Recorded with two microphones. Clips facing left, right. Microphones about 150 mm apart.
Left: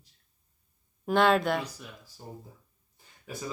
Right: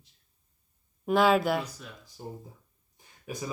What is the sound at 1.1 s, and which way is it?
Speech, centre (ahead or behind).